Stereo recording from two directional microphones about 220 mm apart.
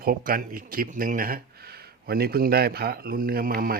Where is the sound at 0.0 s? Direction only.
40° right (ahead or behind).